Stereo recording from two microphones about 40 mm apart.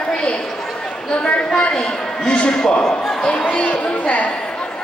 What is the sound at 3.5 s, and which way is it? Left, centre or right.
Speech, left.